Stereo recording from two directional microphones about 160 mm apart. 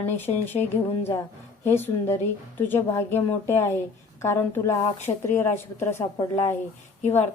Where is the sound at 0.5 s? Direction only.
15° left (ahead or behind).